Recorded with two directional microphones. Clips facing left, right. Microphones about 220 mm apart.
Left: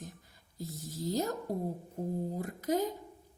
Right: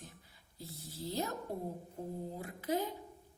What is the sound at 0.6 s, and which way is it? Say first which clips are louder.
Speech: left 6 dB; 45° left (ahead or behind).